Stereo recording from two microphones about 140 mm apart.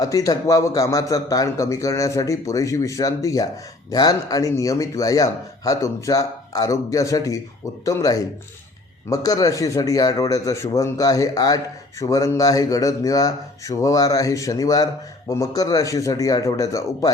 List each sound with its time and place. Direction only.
0.0 s a man's voice: 25° left (ahead or behind)